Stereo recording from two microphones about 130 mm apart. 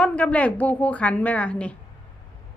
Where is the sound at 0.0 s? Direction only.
10° left (ahead or behind).